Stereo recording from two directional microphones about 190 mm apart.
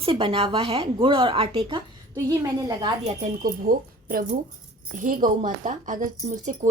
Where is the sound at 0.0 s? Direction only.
30° right (ahead or behind).